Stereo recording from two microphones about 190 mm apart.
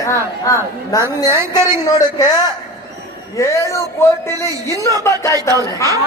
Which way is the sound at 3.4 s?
15° left (ahead or behind).